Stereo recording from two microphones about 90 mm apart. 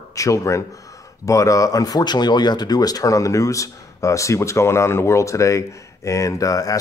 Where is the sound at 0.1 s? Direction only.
35° left (ahead or behind).